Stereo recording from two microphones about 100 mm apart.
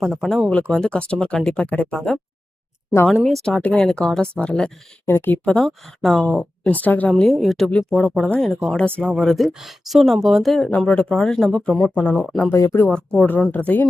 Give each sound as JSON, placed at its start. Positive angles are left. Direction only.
{"t": 0.0, "sound": "speech", "side_deg": -5}
{"t": 0.7, "sound": "speech", "side_deg": 10}
{"t": 5.0, "sound": "speech", "side_deg": 20}
{"t": 7.1, "sound": "speech", "side_deg": 0}
{"t": 7.7, "sound": "speech", "side_deg": 10}
{"t": 10.7, "sound": "speech", "side_deg": 15}
{"t": 12.1, "sound": "speech", "side_deg": 0}
{"t": 12.5, "sound": "speech", "side_deg": 30}
{"t": 12.9, "sound": "speech", "side_deg": 10}